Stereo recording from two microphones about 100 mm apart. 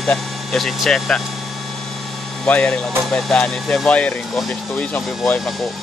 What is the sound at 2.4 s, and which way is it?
Speech, 10° left (ahead or behind).